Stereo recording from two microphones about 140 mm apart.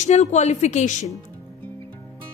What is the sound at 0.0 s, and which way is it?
Speech, 55° left (ahead or behind).